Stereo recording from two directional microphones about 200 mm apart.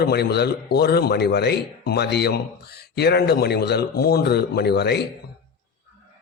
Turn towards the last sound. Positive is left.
turn(degrees=55)  # may be behind; listen again after turning